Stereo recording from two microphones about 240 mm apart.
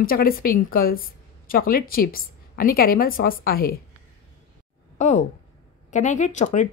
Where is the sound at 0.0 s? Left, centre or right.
Left.